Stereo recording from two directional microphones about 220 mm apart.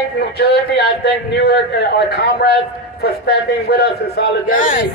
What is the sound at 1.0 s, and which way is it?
A man's voice, 50° left (ahead or behind).